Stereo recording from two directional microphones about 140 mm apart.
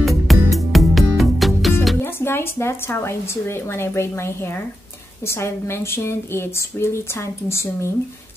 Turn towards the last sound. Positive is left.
turn(degrees=20)  # may be behind; listen again after turning